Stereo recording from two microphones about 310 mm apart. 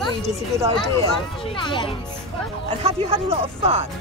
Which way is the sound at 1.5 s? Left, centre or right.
Centre.